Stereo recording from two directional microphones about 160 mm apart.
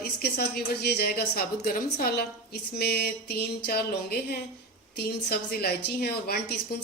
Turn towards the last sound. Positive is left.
turn(degrees=80)